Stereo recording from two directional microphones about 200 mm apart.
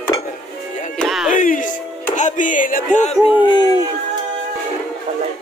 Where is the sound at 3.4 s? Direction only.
20° left (ahead or behind).